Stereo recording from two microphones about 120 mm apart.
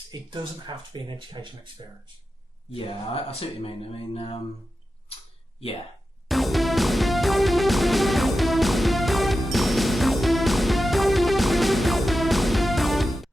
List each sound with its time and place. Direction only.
0.1 s speech: 35° right (ahead or behind)
2.7 s speech: 50° left (ahead or behind)
6.2 s music: centre (ahead or behind)